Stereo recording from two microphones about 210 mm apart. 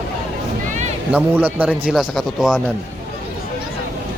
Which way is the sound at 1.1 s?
10° right (ahead or behind).